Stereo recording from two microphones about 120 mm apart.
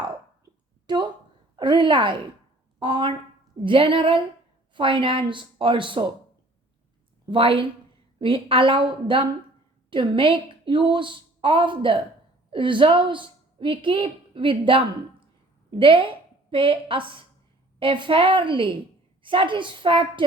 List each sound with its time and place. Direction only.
0.9 s a woman's voice: 35° right (ahead or behind)
1.5 s a sound: 40° right (ahead or behind)
2.7 s a woman's voice: 45° right (ahead or behind)
7.3 s a woman's voice: 45° right (ahead or behind)